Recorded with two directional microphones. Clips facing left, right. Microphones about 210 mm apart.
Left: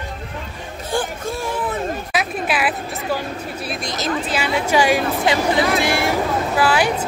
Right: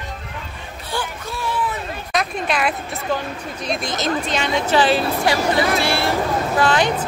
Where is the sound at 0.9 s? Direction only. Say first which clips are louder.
Left 5 dB; 45° left (ahead or behind).